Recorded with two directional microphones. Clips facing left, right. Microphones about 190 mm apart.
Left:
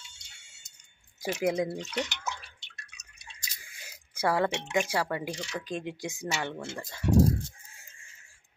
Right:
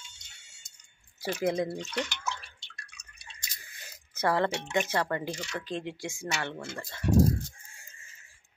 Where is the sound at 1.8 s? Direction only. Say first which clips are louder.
Even; 10° left (ahead or behind).